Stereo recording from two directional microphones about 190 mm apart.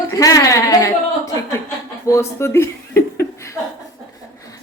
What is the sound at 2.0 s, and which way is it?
Chuckle, 15° left (ahead or behind).